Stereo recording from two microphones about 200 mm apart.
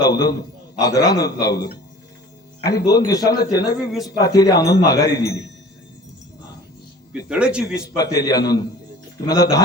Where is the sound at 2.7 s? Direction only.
20° left (ahead or behind).